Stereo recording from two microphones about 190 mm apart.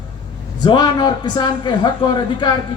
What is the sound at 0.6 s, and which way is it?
A man's voice, 20° left (ahead or behind).